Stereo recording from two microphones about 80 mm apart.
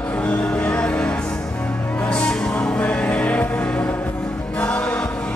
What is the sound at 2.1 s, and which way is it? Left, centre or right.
Music, centre.